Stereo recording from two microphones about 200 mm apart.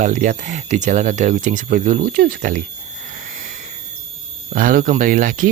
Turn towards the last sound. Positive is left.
turn(degrees=-45)  # may be behind; listen again after turning